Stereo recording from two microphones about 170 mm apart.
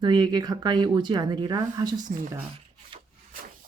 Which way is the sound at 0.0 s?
25° right (ahead or behind).